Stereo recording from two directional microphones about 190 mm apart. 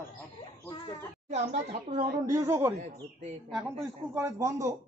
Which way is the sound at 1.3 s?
35° right (ahead or behind).